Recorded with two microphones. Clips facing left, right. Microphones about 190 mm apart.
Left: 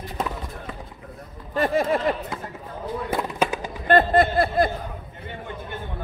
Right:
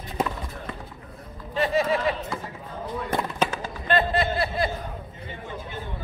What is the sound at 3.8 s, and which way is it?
Speech, 50° left (ahead or behind).